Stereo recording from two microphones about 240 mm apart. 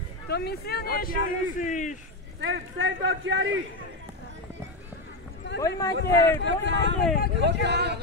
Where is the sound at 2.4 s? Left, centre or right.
Right.